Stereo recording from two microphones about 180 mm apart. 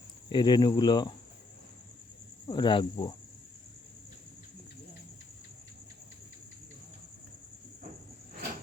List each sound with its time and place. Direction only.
0.3 s speech: 25° left (ahead or behind)
2.5 s speech: 25° left (ahead or behind)